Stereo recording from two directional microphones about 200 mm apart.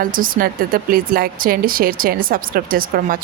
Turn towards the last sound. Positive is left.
turn(degrees=-45)  # may be behind; listen again after turning